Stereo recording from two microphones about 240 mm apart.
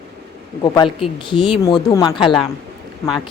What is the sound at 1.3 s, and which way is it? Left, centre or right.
A woman's voice, left.